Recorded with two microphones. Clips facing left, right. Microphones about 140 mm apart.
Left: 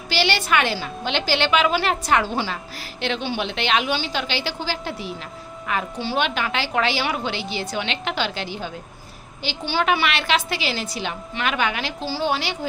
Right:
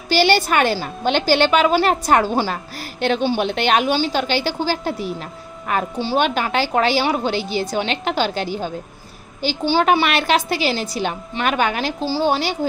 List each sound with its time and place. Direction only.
0.1 s a woman's voice: 45° right (ahead or behind)